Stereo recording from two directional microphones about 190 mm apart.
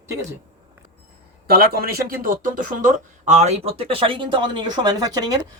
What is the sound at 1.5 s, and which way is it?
Speech, 50° right (ahead or behind).